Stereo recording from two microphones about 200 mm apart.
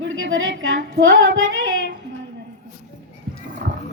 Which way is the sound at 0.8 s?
60° right (ahead or behind).